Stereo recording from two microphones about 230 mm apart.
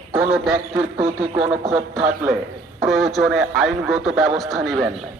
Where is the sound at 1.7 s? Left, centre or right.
Centre.